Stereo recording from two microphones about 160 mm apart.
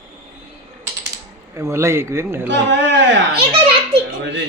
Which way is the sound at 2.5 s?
90° right.